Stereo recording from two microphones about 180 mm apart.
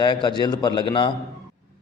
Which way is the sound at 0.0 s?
25° left (ahead or behind).